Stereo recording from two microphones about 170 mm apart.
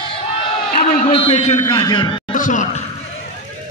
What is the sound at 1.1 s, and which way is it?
A man's voice, 35° left (ahead or behind).